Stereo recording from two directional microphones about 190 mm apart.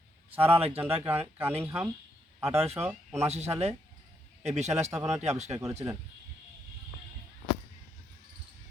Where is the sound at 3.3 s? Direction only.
35° right (ahead or behind).